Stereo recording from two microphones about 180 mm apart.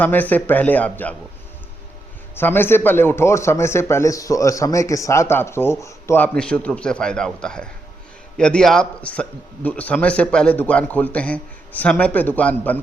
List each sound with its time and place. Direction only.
0.0 s speech: 10° left (ahead or behind)
2.3 s a man's voice: 10° left (ahead or behind)